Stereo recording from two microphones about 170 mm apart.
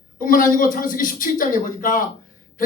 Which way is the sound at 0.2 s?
55° left (ahead or behind).